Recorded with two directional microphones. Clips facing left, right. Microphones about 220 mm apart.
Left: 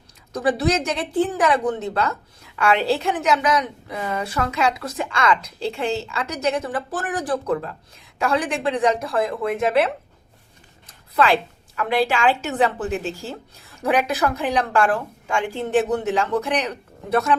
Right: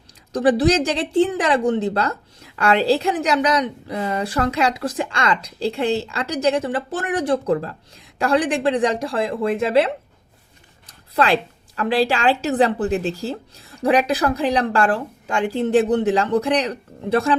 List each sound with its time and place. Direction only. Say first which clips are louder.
0.3 s a woman's voice: right 4 dB; 35° right (ahead or behind)
11.1 s a woman's voice: even; 35° right (ahead or behind)